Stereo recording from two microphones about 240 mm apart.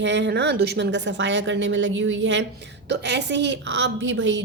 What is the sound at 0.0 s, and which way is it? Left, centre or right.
A woman's voice, right.